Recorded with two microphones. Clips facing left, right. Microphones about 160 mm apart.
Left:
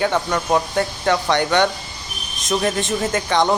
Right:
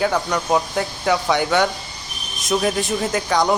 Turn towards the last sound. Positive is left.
turn(degrees=0)  # may be behind; listen again after turning